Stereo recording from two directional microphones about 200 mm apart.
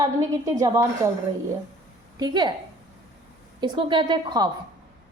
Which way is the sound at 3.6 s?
25° right (ahead or behind).